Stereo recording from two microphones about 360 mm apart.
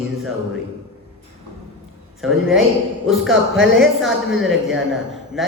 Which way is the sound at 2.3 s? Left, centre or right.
Right.